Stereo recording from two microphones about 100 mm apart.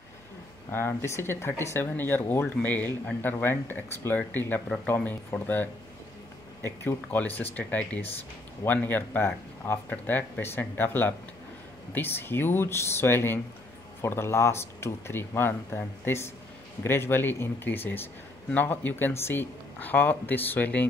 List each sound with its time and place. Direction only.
0.7 s speech: 25° left (ahead or behind)